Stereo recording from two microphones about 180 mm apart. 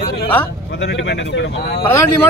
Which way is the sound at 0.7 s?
75° left (ahead or behind).